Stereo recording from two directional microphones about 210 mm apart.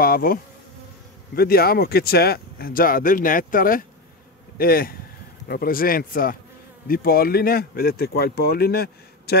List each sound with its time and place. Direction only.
0.0 s bee: 45° left (ahead or behind)
1.3 s speech: 45° left (ahead or behind)